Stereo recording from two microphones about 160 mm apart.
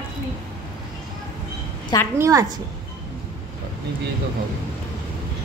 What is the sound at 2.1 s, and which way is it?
Speech, 20° right (ahead or behind).